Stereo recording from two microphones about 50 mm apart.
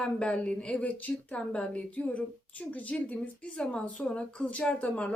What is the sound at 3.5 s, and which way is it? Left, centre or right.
Speech, centre.